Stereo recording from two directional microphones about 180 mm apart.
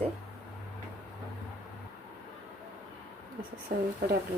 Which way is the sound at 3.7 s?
55° right (ahead or behind).